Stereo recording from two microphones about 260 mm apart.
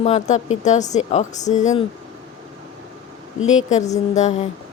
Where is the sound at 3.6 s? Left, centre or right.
Left.